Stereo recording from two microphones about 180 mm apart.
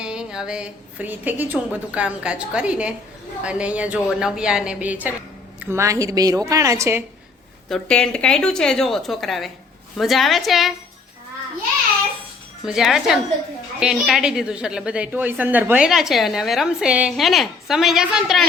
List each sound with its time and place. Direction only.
0.0 s a woman's voice: 5° right (ahead or behind)
7.7 s a woman's voice: 5° left (ahead or behind)
12.6 s a woman's voice: centre (ahead or behind)